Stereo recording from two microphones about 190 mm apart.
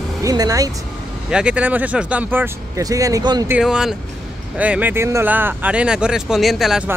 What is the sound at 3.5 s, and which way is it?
Speech, 5° right (ahead or behind).